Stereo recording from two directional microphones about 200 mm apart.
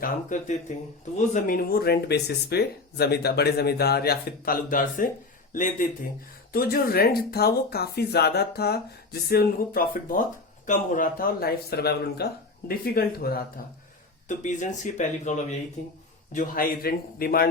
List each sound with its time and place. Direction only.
0.0 s speech: 40° left (ahead or behind)
6.5 s speech: 50° left (ahead or behind)
14.3 s speech: 40° left (ahead or behind)